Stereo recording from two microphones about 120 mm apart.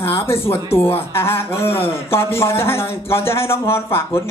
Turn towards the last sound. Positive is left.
turn(degrees=20)  # may be behind; listen again after turning